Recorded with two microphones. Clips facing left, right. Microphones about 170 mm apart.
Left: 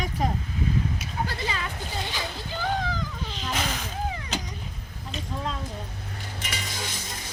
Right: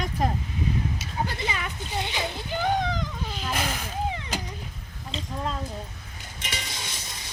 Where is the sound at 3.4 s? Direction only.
5° right (ahead or behind).